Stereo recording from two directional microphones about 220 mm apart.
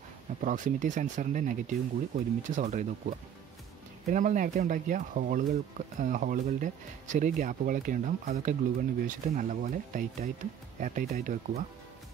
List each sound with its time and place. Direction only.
0.4 s speech: 35° right (ahead or behind)